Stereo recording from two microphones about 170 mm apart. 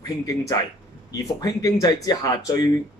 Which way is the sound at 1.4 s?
20° left (ahead or behind).